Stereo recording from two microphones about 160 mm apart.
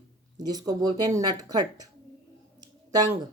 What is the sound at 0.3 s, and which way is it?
Speech, 25° right (ahead or behind).